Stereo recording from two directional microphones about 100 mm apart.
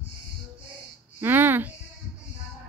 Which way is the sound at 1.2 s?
20° right (ahead or behind).